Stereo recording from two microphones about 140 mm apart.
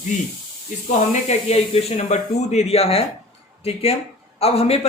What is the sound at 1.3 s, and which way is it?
Speech, 50° left (ahead or behind).